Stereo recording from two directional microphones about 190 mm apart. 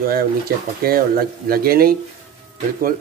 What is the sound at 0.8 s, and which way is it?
Speech, 50° right (ahead or behind).